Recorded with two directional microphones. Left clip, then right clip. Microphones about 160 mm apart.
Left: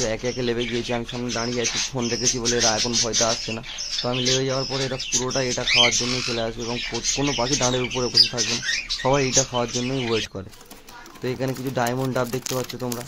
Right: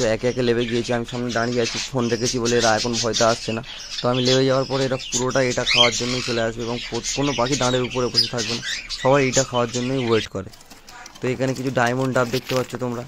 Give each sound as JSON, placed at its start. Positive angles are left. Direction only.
{"t": 0.0, "sound": "speech", "side_deg": -25}
{"t": 4.0, "sound": "speech", "side_deg": -45}
{"t": 5.2, "sound": "speech", "side_deg": -30}
{"t": 11.2, "sound": "speech", "side_deg": -20}